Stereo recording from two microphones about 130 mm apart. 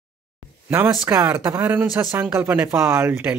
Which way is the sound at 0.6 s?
15° right (ahead or behind).